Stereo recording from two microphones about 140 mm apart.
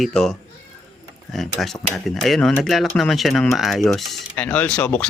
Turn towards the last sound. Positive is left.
turn(degrees=10)  # may be behind; listen again after turning